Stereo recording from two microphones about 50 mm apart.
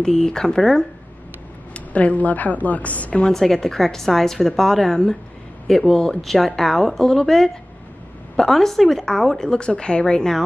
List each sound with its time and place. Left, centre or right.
0.0 s a woman's voice: centre
1.7 s a woman's voice: left
3.3 s a woman's voice: centre